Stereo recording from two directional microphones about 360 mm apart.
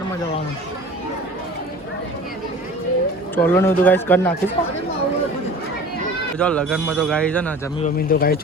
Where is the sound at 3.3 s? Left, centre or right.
Centre.